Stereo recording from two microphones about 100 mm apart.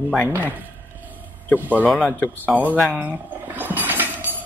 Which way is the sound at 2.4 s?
15° right (ahead or behind).